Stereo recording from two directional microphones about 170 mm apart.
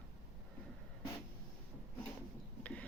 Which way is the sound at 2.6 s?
5° left (ahead or behind).